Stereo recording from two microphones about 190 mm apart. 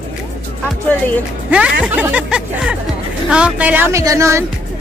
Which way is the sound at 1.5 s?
5° right (ahead or behind).